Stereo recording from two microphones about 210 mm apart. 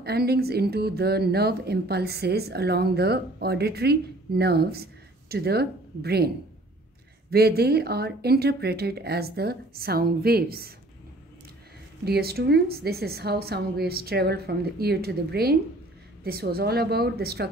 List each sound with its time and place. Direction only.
0.0 s speech: 50° right (ahead or behind)
12.0 s speech: 50° right (ahead or behind)